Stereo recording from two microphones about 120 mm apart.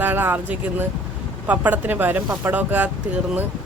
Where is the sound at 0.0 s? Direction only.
15° right (ahead or behind).